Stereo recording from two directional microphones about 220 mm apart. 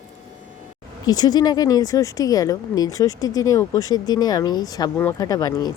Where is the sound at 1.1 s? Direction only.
20° left (ahead or behind).